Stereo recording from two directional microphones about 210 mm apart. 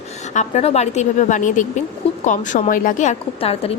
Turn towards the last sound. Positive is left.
turn(degrees=30)  # may be behind; listen again after turning